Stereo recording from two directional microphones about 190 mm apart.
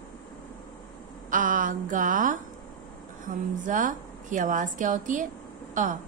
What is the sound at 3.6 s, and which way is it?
A woman's voice, 45° right (ahead or behind).